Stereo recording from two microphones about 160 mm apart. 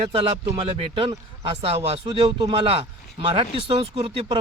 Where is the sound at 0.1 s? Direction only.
35° right (ahead or behind).